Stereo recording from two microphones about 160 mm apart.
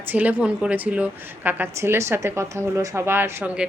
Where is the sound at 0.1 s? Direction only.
10° right (ahead or behind).